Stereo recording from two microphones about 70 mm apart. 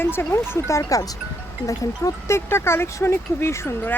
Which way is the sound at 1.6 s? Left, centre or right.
Left.